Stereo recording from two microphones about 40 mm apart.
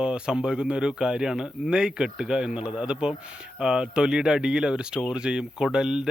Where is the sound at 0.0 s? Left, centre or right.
Right.